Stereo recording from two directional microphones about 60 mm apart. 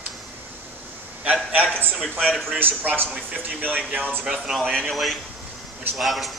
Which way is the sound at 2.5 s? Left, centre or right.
Right.